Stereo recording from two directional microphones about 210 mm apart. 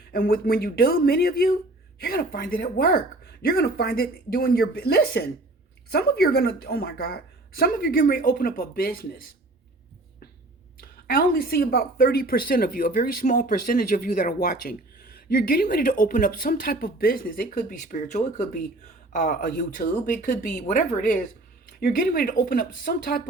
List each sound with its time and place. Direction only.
0.1 s a woman's voice: 45° left (ahead or behind)
10.8 s a woman's voice: 45° left (ahead or behind)